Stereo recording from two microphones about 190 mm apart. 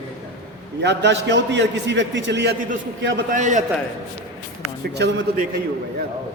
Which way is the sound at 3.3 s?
40° right (ahead or behind).